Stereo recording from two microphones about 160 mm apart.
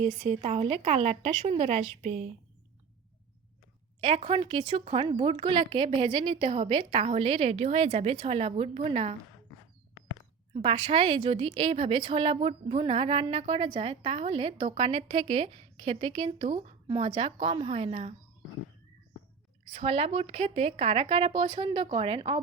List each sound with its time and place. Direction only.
0.2 s speech: 40° right (ahead or behind)
2.0 s a woman's voice: 50° right (ahead or behind)
4.0 s speech: 40° right (ahead or behind)
10.5 s speech: 40° right (ahead or behind)
19.7 s speech: 40° right (ahead or behind)